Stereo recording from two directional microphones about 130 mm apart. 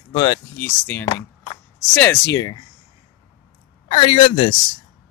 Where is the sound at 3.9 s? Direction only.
45° left (ahead or behind).